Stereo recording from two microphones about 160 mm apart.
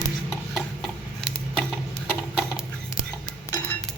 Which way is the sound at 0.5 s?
Centre (ahead or behind).